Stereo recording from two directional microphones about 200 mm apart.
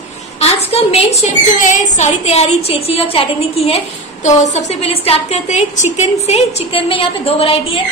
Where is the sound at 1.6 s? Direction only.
40° left (ahead or behind).